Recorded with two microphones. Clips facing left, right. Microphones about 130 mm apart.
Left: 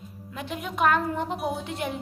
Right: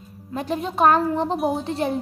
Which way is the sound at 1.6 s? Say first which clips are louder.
Right 7 dB; 35° right (ahead or behind).